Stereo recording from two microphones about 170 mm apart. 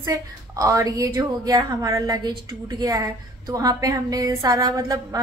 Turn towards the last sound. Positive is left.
turn(degrees=-20)  # may be behind; listen again after turning